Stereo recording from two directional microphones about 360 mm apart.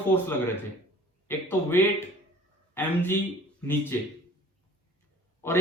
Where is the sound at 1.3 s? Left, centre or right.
Centre.